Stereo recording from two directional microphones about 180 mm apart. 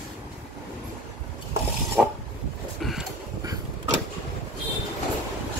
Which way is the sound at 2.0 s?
5° right (ahead or behind).